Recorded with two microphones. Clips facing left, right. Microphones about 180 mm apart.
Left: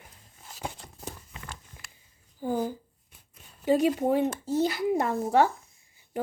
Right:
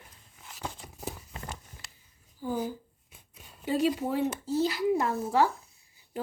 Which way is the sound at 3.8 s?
50° left (ahead or behind).